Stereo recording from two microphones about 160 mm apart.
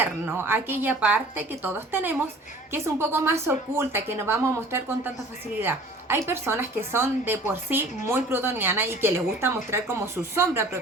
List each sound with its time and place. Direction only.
0.0 s a woman's voice: 15° right (ahead or behind)